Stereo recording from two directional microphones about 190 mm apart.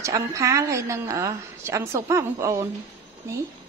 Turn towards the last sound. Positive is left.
turn(degrees=-15)  # may be behind; listen again after turning